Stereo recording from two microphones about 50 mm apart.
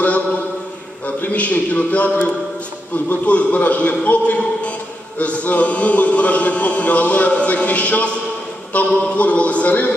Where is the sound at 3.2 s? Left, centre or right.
Left.